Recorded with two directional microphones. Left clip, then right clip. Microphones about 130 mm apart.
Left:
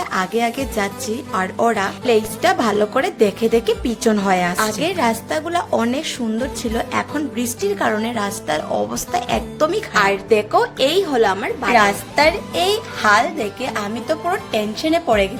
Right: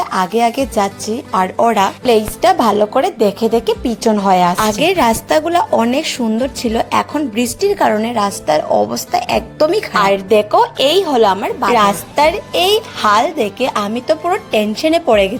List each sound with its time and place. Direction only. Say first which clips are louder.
0.0 s a woman's voice: right 5 dB; 35° right (ahead or behind)
4.5 s a woman's voice: right 6 dB; 65° right (ahead or behind)
5.5 s a woman's voice: right 6 dB; 40° right (ahead or behind)